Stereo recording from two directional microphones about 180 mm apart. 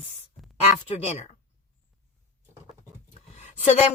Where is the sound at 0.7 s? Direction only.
35° left (ahead or behind).